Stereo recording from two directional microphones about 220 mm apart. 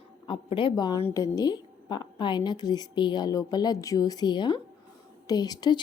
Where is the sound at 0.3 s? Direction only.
25° left (ahead or behind).